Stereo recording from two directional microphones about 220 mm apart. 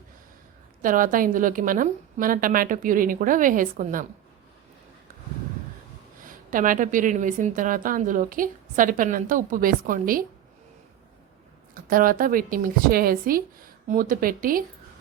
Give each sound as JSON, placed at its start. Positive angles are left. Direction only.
{"t": 0.8, "sound": "a woman's voice", "side_deg": -40}
{"t": 6.2, "sound": "a woman's voice", "side_deg": -40}
{"t": 11.7, "sound": "a woman's voice", "side_deg": -40}